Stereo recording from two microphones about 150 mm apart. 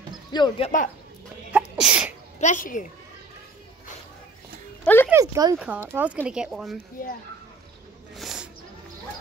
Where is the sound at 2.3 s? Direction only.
55° left (ahead or behind).